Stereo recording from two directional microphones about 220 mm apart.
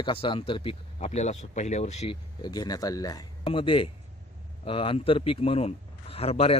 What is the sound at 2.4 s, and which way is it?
Speech, 20° left (ahead or behind).